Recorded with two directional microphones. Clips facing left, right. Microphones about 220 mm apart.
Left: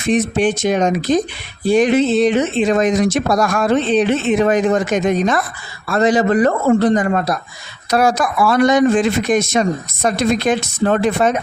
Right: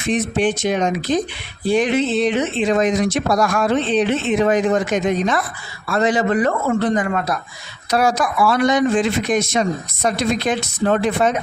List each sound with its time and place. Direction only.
0.1 s speech: 45° left (ahead or behind)
7.9 s speech: 50° left (ahead or behind)